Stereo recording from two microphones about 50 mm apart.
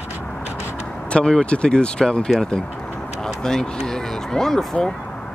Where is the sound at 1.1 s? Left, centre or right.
Centre.